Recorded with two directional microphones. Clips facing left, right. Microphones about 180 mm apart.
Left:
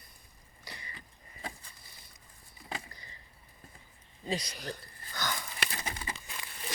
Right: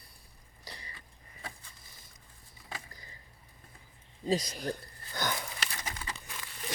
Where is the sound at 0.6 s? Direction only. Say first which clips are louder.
Even; 35° right (ahead or behind).